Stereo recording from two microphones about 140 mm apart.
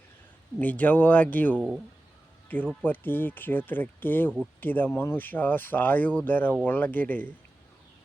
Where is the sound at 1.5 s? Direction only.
5° right (ahead or behind).